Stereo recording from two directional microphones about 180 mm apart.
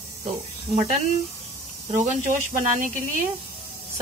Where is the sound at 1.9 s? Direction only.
40° right (ahead or behind).